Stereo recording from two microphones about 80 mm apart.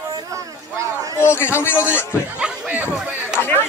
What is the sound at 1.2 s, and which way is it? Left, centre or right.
Speech, left.